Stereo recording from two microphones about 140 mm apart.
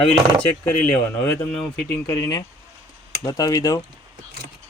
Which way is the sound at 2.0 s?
25° left (ahead or behind).